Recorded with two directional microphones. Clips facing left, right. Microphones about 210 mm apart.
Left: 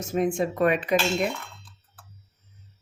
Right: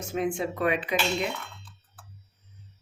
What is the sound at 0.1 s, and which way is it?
Speech, 45° left (ahead or behind).